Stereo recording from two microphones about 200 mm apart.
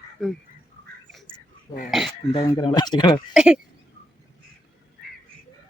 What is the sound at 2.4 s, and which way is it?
Speech, 20° left (ahead or behind).